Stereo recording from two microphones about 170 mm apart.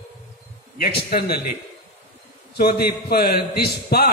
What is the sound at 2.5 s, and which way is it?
A man's voice, 70° left (ahead or behind).